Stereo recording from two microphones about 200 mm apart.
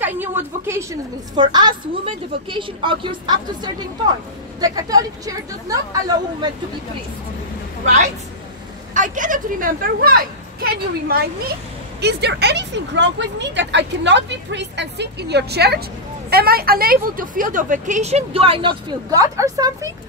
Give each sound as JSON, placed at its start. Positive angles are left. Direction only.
{"t": 0.0, "sound": "a sound", "side_deg": -10}
{"t": 1.3, "sound": "a woman's voice", "side_deg": -20}
{"t": 7.8, "sound": "a woman's voice", "side_deg": -35}